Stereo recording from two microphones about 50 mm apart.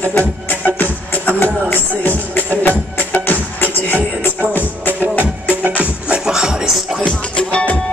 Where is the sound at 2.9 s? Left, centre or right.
Left.